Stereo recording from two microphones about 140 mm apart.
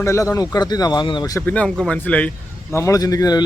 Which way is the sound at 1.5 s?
10° left (ahead or behind).